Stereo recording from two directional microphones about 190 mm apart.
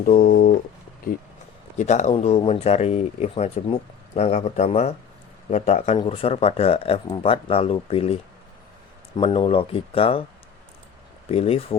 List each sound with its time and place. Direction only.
0.0 s speech: 50° left (ahead or behind)
1.8 s speech: 40° left (ahead or behind)
11.3 s speech: 30° left (ahead or behind)